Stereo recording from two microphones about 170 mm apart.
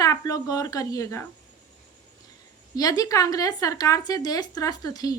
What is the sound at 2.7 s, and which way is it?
Speech, 20° left (ahead or behind).